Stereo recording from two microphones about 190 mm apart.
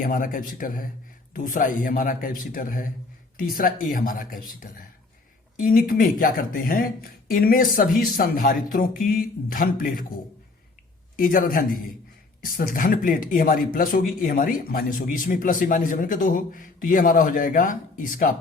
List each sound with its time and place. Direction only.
0.0 s speech: 45° left (ahead or behind)
11.2 s speech: 45° left (ahead or behind)